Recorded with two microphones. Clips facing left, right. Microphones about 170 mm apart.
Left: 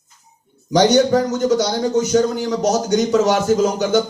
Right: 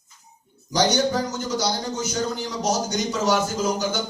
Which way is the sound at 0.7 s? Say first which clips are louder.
Left 8 dB; 65° left (ahead or behind).